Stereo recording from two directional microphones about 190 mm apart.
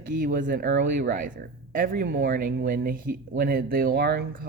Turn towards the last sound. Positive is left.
turn(degrees=-50)  # may be behind; listen again after turning